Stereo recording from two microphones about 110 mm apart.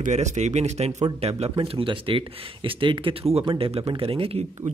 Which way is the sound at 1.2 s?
70° right (ahead or behind).